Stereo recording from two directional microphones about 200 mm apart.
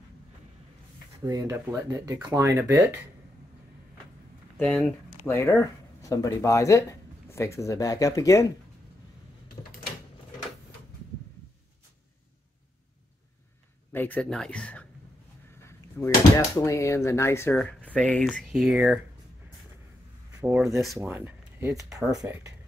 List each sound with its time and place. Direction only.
1.2 s speech: 15° right (ahead or behind)
4.6 s speech: 10° left (ahead or behind)
13.9 s speech: 5° left (ahead or behind)
20.3 s speech: 10° right (ahead or behind)